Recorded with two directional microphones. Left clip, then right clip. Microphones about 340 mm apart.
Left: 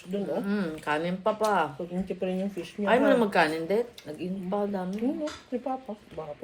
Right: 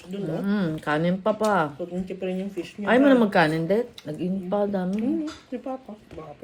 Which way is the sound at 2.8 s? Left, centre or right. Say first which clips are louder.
Right 3 dB; right.